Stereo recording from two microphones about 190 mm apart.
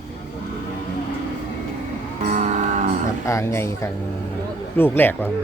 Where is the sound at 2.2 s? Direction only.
40° right (ahead or behind).